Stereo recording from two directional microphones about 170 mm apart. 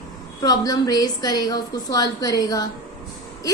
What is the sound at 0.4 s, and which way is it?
A woman's voice, 20° left (ahead or behind).